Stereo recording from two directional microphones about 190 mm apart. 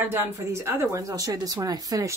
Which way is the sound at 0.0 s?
10° right (ahead or behind).